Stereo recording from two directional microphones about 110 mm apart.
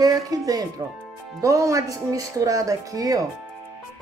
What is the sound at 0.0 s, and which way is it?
A woman's voice, 35° right (ahead or behind).